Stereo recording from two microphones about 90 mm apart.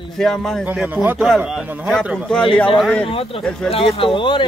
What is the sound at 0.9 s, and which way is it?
Speech, 20° right (ahead or behind).